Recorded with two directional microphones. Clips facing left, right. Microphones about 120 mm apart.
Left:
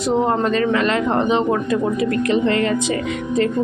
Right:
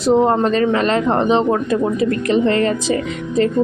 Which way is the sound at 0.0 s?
30° right (ahead or behind).